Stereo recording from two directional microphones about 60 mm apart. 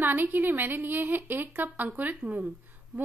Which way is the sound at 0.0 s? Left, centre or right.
Right.